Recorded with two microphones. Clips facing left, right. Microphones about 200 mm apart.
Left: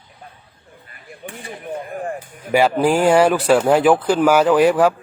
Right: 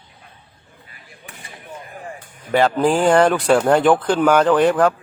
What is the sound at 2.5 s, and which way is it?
Speech, 10° left (ahead or behind).